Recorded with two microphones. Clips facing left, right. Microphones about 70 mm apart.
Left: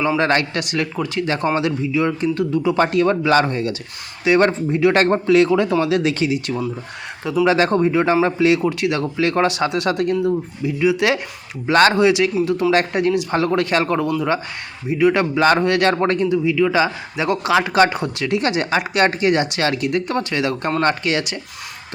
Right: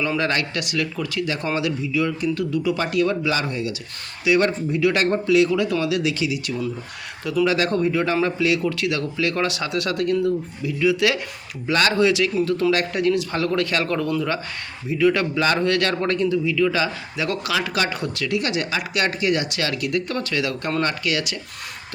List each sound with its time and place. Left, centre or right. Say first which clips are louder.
0.2 s a man's voice: left 5 dB; left
2.7 s a man's voice: left 5 dB; left
11.6 s speech: left 6 dB; left
11.9 s a man's voice: left 3 dB; left